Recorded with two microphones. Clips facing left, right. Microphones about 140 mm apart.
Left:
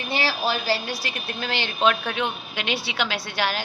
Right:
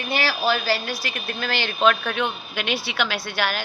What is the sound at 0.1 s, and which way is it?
A woman's voice, 25° left (ahead or behind).